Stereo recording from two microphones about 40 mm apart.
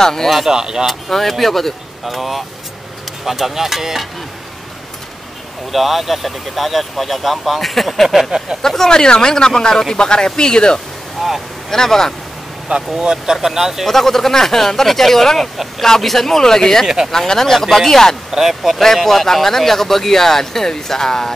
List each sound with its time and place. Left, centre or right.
0.0 s speech: centre
0.5 s speech: centre
0.8 s speech: centre
5.7 s speech: centre
8.2 s speech: centre
8.6 s speech: centre
11.1 s speech: centre
11.7 s speech: centre
12.6 s speech: right; by 13.8 s centre
13.8 s speech: centre
16.8 s speech: centre
17.1 s speech: centre
18.3 s speech: centre
19.0 s speech: centre